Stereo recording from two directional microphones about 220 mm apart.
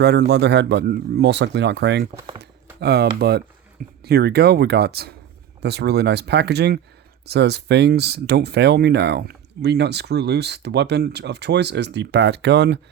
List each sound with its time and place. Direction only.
0.0 s speech: 50° right (ahead or behind)